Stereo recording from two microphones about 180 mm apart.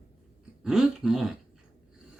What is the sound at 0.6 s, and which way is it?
Speech, 5° right (ahead or behind).